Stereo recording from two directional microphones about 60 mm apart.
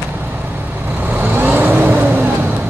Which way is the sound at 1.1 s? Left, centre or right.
Right.